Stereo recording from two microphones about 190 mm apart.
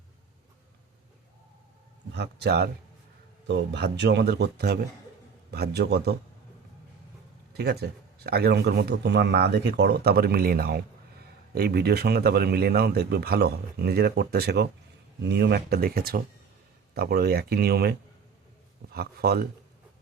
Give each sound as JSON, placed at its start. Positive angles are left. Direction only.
{"t": 2.1, "sound": "speech", "side_deg": -60}
{"t": 7.5, "sound": "speech", "side_deg": -60}
{"t": 18.9, "sound": "speech", "side_deg": -55}